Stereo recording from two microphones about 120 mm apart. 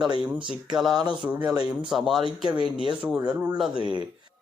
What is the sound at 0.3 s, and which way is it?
A man's voice, 10° right (ahead or behind).